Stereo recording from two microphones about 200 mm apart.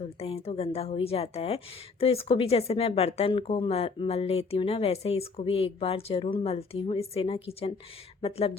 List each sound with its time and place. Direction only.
0.0 s a woman's voice: 30° left (ahead or behind)